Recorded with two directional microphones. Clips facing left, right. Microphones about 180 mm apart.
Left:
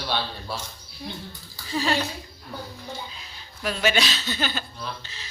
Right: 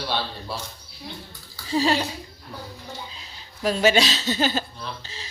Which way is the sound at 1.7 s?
35° right (ahead or behind).